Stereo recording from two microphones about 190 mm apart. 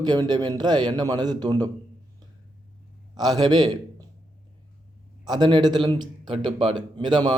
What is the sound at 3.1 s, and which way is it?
Speech, 20° right (ahead or behind).